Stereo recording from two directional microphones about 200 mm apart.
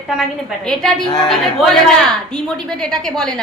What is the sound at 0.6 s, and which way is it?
Speech, centre (ahead or behind).